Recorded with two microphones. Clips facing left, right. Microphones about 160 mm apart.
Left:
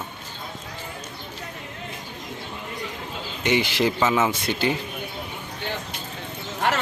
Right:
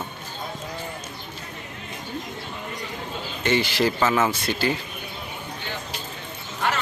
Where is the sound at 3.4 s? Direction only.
15° left (ahead or behind).